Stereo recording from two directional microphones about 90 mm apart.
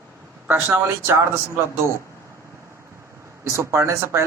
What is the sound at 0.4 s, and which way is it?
Speech, 20° right (ahead or behind).